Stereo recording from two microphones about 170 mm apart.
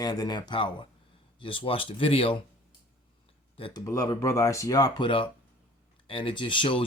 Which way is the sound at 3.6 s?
30° left (ahead or behind).